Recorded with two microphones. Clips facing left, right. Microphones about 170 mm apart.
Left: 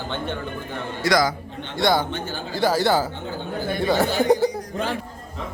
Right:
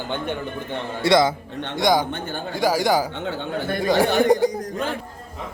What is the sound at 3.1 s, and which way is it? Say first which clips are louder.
Speech: right 2 dB; 75° right (ahead or behind).